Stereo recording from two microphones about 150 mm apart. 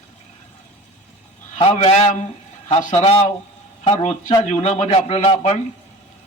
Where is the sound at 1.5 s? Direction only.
40° left (ahead or behind).